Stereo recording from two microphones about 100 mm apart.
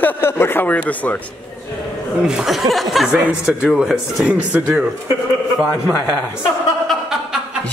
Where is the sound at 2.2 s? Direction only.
5° right (ahead or behind).